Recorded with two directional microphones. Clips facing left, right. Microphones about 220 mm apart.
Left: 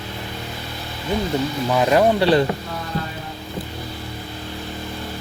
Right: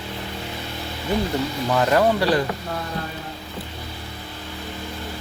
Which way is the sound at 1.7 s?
15° left (ahead or behind).